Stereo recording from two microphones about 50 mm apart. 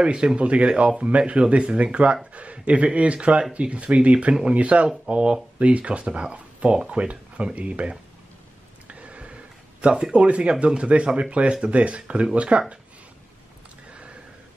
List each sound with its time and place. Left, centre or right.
0.0 s speech: centre
8.8 s a sound: right
10.1 s speech: right